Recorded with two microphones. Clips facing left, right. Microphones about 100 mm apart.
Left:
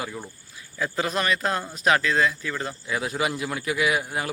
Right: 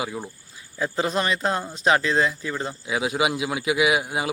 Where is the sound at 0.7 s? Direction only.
25° right (ahead or behind).